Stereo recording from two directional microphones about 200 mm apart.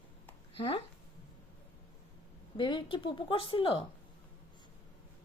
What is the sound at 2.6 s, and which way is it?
Speech, 25° left (ahead or behind).